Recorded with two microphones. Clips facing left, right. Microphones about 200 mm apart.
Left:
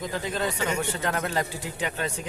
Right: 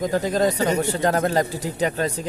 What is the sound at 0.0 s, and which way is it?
Speech, 40° right (ahead or behind).